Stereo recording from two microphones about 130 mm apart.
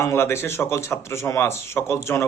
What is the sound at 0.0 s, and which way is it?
A man's voice, 20° left (ahead or behind).